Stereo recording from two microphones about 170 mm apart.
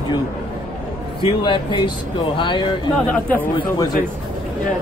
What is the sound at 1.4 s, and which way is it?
Speech, 25° left (ahead or behind).